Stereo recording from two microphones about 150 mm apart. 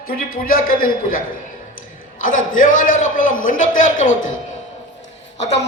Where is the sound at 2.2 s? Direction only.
65° left (ahead or behind).